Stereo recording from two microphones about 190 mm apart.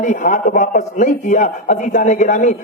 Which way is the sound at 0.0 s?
40° left (ahead or behind).